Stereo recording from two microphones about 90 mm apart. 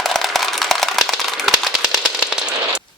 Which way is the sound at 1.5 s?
Centre (ahead or behind).